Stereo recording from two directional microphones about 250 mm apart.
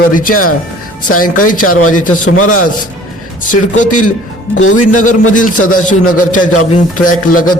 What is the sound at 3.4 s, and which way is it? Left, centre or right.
A man's voice, left.